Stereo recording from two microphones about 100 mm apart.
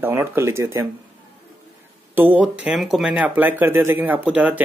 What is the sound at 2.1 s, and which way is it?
Speech, 20° right (ahead or behind).